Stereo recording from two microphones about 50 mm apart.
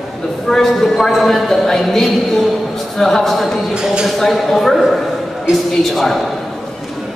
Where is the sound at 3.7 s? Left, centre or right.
Centre.